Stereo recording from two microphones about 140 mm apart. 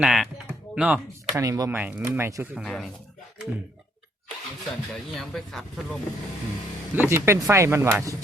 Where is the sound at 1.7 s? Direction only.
15° right (ahead or behind).